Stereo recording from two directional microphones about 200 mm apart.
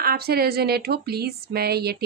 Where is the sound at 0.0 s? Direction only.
50° right (ahead or behind).